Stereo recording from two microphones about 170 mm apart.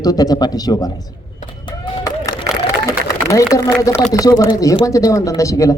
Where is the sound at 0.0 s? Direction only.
20° left (ahead or behind).